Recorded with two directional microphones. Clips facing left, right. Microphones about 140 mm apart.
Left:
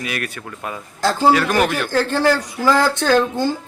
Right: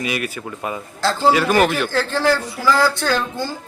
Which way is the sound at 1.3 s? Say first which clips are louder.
Right 1 dB; 5° right (ahead or behind).